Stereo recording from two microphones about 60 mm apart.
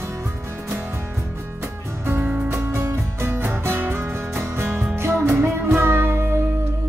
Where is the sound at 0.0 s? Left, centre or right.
Right.